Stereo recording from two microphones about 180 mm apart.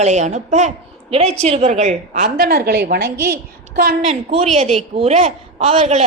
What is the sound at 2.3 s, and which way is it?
A woman's voice, 60° right (ahead or behind).